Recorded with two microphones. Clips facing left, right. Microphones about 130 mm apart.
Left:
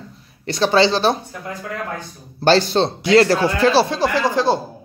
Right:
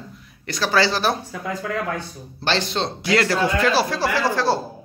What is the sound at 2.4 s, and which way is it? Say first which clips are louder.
Speech: left 8 dB; 40° left (ahead or behind).